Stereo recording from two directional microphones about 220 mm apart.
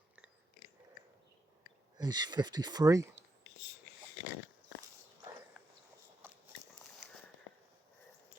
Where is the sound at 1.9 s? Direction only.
20° right (ahead or behind).